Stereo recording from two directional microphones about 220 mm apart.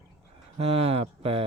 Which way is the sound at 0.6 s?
25° right (ahead or behind).